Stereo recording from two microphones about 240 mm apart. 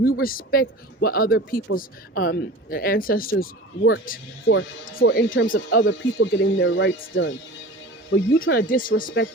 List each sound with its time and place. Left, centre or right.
0.0 s speech: left
4.5 s speech: left